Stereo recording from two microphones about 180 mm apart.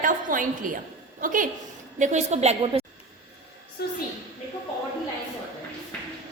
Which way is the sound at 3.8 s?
65° left (ahead or behind).